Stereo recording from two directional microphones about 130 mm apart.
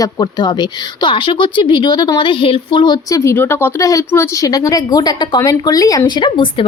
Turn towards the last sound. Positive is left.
turn(degrees=40)  # may be behind; listen again after turning